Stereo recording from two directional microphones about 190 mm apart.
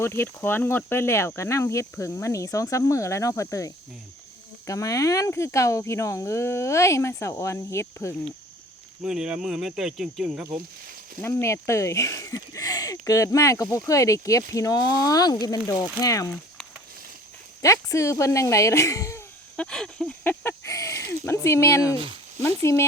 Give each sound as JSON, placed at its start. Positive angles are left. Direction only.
{"t": 0.0, "sound": "speech", "side_deg": 10}
{"t": 9.0, "sound": "cricket", "side_deg": -5}
{"t": 11.2, "sound": "speech", "side_deg": 15}
{"t": 17.6, "sound": "speech", "side_deg": 15}
{"t": 19.7, "sound": "a sound", "side_deg": 5}
{"t": 21.2, "sound": "speech", "side_deg": 15}